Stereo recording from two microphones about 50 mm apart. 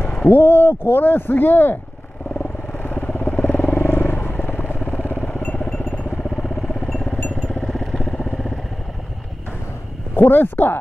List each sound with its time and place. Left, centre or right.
0.1 s speech: left
2.8 s vehicle: left; by 8.5 s centre
10.1 s speech: left